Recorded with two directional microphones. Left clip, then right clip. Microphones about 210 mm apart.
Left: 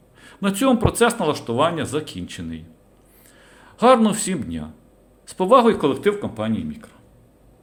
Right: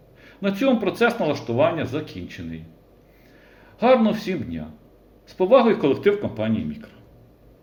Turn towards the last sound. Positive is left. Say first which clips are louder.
# even
turn(degrees=25)  # may be behind; listen again after turning